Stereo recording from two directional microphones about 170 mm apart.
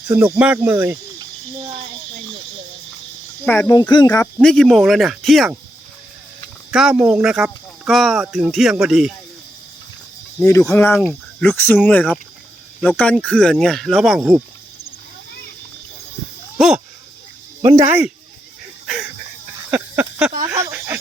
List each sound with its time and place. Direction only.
0.1 s speech: 10° right (ahead or behind)
3.4 s speech: 15° left (ahead or behind)
4.4 s speech: 5° left (ahead or behind)
6.7 s speech: 5° right (ahead or behind)
10.7 s speech: 15° left (ahead or behind); by 14.4 s 5° right (ahead or behind)
16.6 s speech: 5° right (ahead or behind)
17.8 s speech: 10° right (ahead or behind)
19.7 s a sound: 10° right (ahead or behind)